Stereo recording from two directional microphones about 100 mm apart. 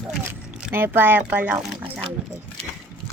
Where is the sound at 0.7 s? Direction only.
20° right (ahead or behind).